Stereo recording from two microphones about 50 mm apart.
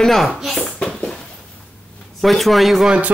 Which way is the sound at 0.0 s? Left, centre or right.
Centre.